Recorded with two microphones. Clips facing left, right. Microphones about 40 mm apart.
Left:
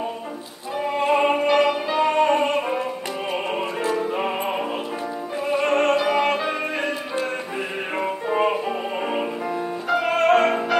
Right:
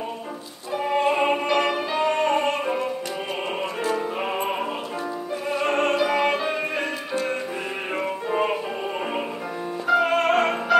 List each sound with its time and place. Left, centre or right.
0.7 s music: centre
5.4 s opera: centre
7.9 s music: centre